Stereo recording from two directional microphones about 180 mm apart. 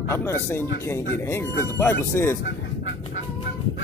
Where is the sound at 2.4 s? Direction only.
90° left.